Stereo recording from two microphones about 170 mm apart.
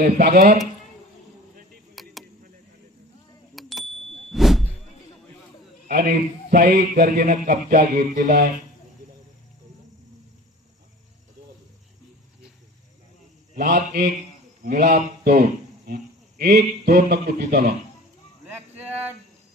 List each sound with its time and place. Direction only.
0.0 s a man's voice: 60° right (ahead or behind)
2.0 s a sound: centre (ahead or behind)
3.5 s a sound: centre (ahead or behind)
5.9 s a man's voice: 55° right (ahead or behind)
13.6 s a man's voice: 65° right (ahead or behind)
14.6 s speech: 45° right (ahead or behind); by 17.7 s 65° right (ahead or behind)